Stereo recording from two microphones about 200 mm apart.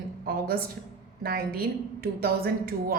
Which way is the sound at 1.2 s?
50° right (ahead or behind).